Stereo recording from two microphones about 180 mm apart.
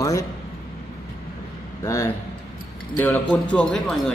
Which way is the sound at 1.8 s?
15° left (ahead or behind).